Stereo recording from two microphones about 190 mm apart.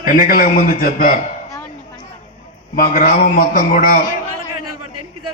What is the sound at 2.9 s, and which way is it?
A man's voice, 45° left (ahead or behind).